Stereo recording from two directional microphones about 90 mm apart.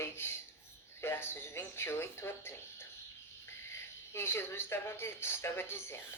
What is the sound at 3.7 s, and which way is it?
Speech, 25° left (ahead or behind).